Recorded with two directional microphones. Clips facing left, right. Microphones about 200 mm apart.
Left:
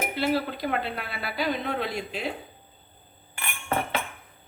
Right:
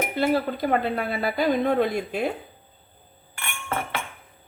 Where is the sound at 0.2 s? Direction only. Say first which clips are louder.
Right 4 dB; 45° right (ahead or behind).